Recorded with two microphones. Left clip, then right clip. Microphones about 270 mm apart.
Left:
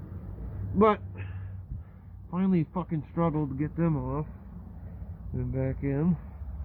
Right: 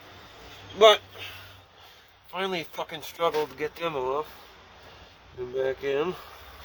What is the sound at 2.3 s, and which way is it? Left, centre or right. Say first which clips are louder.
Speech: right 1 dB; centre.